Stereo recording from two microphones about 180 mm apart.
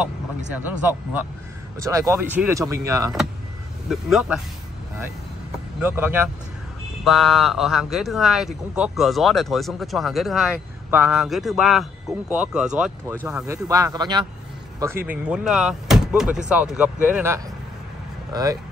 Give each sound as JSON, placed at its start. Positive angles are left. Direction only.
{"t": 0.6, "sound": "speech", "side_deg": -10}
{"t": 3.9, "sound": "speech", "side_deg": -5}
{"t": 5.8, "sound": "speech", "side_deg": -10}
{"t": 7.1, "sound": "speech", "side_deg": 0}
{"t": 13.5, "sound": "speech", "side_deg": -20}
{"t": 15.0, "sound": "speech", "side_deg": -5}